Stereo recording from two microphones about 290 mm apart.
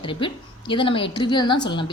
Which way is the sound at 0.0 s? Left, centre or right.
Centre.